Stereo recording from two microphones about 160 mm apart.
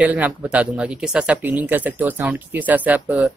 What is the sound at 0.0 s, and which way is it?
Speech, 10° right (ahead or behind).